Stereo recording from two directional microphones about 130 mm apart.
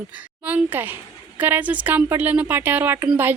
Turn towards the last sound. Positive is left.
turn(degrees=-15)  # may be behind; listen again after turning